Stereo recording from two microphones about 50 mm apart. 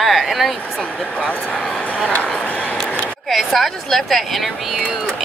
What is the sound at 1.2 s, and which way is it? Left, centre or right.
Speech, left.